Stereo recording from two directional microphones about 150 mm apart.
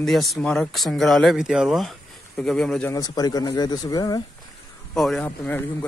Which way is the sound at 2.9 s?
25° left (ahead or behind).